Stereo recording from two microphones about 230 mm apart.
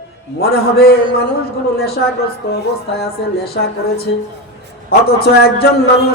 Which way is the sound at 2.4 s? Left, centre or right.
Left.